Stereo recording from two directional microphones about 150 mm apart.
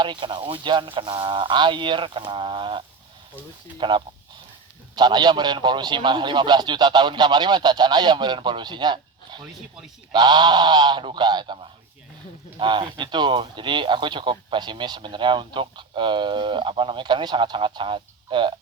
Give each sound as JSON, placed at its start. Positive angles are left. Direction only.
{"t": 0.0, "sound": "a man's voice", "side_deg": -30}